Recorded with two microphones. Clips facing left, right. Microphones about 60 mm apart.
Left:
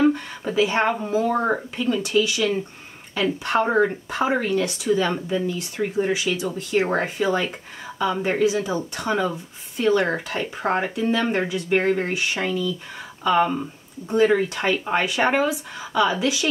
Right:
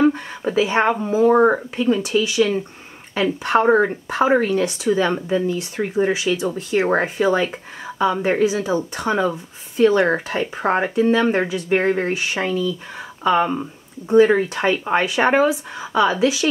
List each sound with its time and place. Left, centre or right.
0.0 s speech: centre